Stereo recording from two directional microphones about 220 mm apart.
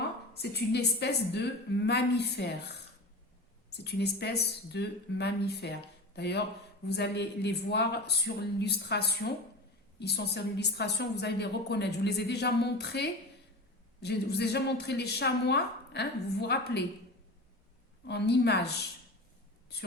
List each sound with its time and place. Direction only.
0.3 s a woman's voice: 50° left (ahead or behind)
18.0 s a woman's voice: 50° left (ahead or behind)